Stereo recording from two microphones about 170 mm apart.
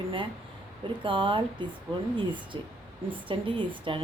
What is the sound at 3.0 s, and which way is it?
Speech, 30° right (ahead or behind).